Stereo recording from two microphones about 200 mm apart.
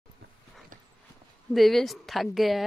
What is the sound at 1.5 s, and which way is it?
Speech, centre (ahead or behind).